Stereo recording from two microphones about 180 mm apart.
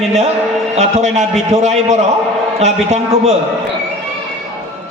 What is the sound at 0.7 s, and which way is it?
A man's voice, 40° right (ahead or behind).